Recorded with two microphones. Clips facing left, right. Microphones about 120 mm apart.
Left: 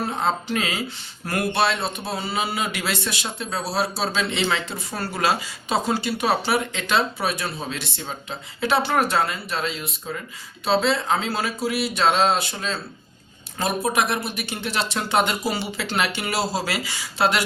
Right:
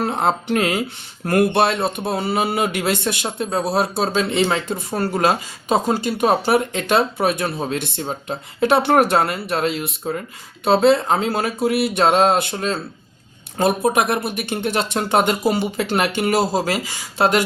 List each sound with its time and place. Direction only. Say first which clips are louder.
0.0 s speech: right 4 dB; 65° right (ahead or behind); by 17.4 s 45° right (ahead or behind)